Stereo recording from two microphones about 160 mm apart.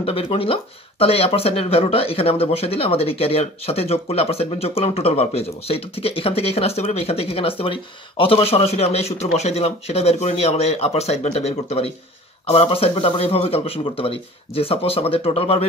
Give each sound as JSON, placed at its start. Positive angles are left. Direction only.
{"t": 0.0, "sound": "speech", "side_deg": 35}